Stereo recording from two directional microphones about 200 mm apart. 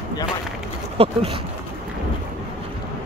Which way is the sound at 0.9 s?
30° right (ahead or behind).